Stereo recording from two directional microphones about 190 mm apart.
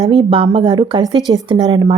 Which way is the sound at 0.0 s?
25° right (ahead or behind).